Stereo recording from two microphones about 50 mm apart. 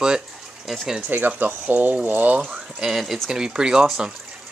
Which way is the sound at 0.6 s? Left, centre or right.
Centre.